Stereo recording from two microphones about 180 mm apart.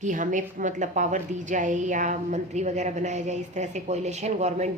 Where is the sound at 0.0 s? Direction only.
45° right (ahead or behind).